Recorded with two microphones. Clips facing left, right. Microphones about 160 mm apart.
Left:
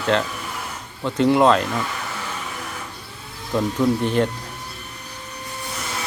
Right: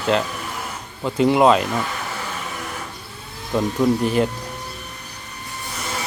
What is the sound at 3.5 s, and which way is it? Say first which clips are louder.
Speech: right 1 dB; 10° right (ahead or behind).